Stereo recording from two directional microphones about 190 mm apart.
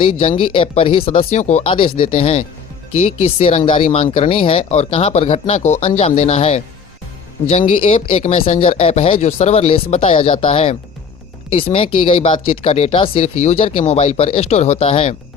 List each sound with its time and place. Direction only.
0.2 s speech: 30° left (ahead or behind)